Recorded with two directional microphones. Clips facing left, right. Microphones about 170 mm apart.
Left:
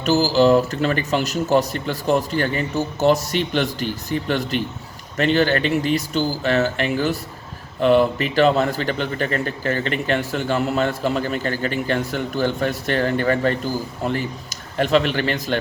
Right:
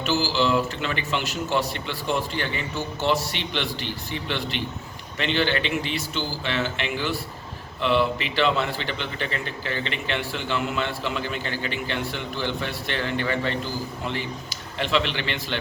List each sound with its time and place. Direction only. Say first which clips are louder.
0.0 s a man's voice: left 7 dB; 40° left (ahead or behind)